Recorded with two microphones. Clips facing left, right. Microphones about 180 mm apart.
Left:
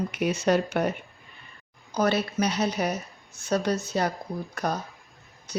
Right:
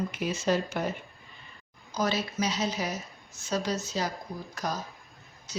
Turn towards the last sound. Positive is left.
turn(degrees=55)  # may be behind; listen again after turning